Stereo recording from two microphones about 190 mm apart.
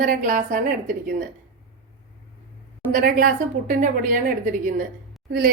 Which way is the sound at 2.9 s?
45° right (ahead or behind).